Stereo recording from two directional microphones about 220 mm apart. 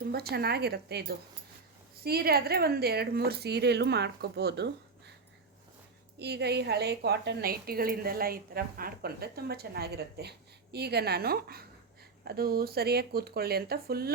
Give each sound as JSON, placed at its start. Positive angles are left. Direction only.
{"t": 0.1, "sound": "a woman's voice", "side_deg": -45}
{"t": 6.1, "sound": "a woman's voice", "side_deg": -50}